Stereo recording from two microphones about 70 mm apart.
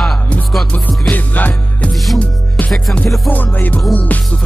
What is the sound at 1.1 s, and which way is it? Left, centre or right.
Music, left.